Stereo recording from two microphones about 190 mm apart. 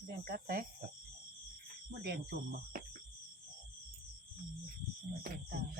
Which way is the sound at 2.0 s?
60° right (ahead or behind).